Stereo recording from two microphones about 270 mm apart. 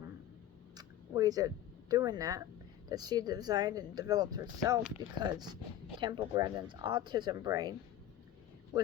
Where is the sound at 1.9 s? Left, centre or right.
Centre.